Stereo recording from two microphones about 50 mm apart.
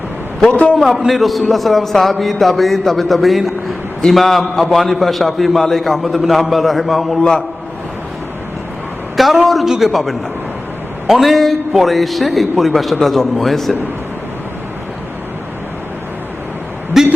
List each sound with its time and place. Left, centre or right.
0.4 s a man's voice: left
0.8 s a man's voice: centre
7.2 s a man's voice: centre
9.1 s a man's voice: centre
16.9 s speech: centre